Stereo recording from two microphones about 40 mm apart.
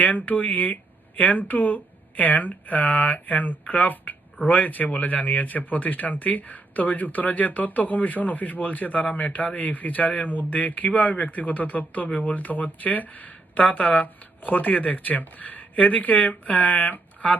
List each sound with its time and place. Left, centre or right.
0.0 s speech: left